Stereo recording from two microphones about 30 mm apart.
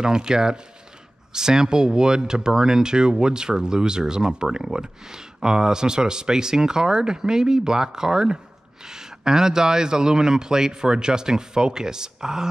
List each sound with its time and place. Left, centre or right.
0.0 s speech: right